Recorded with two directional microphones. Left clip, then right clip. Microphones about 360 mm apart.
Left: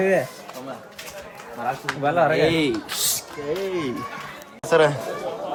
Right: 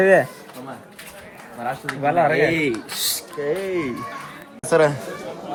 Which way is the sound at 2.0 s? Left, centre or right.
Centre.